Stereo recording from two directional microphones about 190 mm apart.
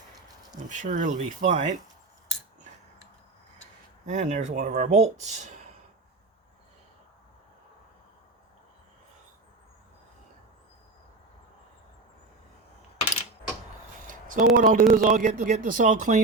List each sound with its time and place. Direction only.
0.7 s speech: 40° right (ahead or behind)
4.0 s speech: 40° right (ahead or behind)
14.1 s a man's voice: 45° right (ahead or behind)